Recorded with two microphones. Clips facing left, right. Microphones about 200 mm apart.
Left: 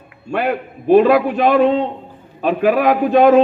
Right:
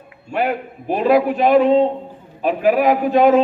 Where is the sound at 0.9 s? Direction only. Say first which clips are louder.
Left 4 dB; 70° left (ahead or behind).